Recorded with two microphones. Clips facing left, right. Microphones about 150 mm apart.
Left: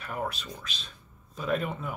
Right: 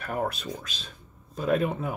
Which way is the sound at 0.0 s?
45° right (ahead or behind).